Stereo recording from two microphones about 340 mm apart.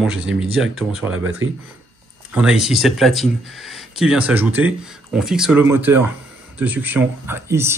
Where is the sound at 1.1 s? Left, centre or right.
Right.